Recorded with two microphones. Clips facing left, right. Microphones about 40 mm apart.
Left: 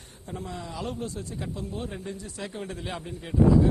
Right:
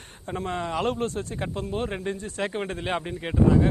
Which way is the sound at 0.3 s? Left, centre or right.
Right.